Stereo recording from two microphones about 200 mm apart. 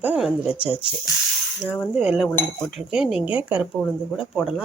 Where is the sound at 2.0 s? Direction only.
Centre (ahead or behind).